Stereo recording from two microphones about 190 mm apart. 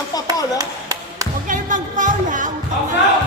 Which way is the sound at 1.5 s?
45° right (ahead or behind).